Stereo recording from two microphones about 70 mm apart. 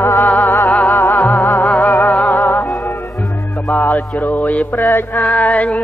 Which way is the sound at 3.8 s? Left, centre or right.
Left.